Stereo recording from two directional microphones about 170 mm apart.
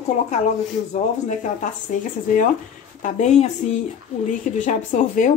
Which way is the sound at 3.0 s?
45° left (ahead or behind).